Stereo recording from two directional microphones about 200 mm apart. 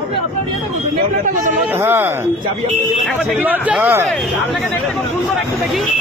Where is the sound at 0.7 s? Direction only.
40° right (ahead or behind).